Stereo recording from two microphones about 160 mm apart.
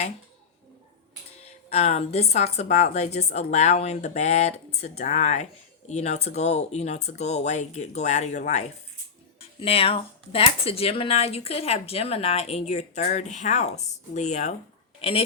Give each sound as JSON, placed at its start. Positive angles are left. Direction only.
{"t": 1.5, "sound": "a woman's voice", "side_deg": 40}